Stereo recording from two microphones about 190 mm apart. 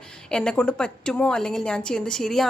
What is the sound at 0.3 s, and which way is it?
A woman's voice, 5° left (ahead or behind).